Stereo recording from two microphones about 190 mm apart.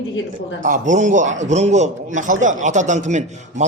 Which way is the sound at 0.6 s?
40° right (ahead or behind).